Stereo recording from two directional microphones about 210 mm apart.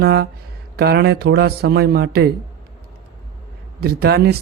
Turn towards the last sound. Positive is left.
turn(degrees=-50)  # may be behind; listen again after turning